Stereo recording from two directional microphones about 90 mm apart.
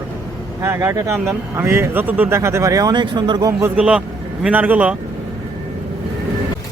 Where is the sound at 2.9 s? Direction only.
55° right (ahead or behind).